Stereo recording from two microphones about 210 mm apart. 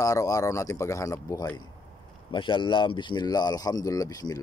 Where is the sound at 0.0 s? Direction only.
15° left (ahead or behind).